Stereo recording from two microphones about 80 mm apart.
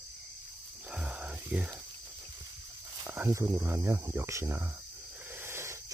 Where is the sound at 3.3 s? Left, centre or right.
Right.